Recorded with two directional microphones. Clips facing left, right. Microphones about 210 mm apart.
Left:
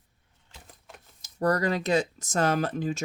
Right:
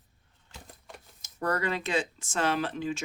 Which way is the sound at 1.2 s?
35° left (ahead or behind).